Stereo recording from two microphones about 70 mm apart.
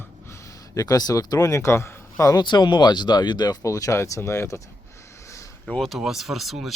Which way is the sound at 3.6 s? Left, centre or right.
Left.